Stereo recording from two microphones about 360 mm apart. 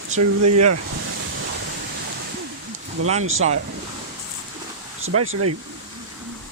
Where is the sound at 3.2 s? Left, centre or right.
Right.